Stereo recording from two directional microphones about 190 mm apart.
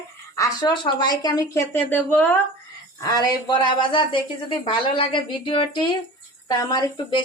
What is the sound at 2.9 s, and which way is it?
A woman's voice, 20° left (ahead or behind).